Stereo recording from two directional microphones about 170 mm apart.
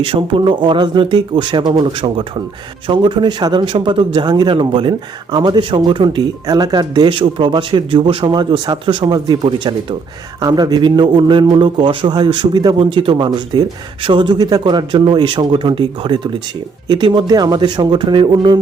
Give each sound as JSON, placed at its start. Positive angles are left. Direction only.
{"t": 0.0, "sound": "speech", "side_deg": -30}